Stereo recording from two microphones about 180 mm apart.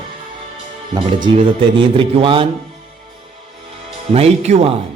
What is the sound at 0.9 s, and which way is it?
Speech, 30° right (ahead or behind).